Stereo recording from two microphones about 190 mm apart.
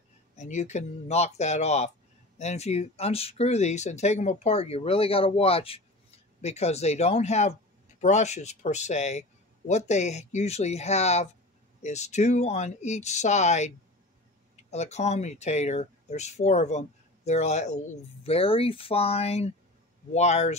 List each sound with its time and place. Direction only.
0.4 s speech: 40° left (ahead or behind)